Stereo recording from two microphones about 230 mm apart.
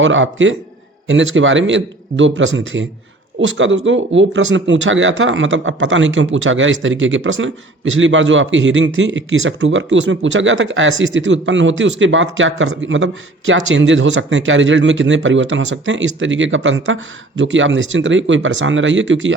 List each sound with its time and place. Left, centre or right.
0.0 s speech: right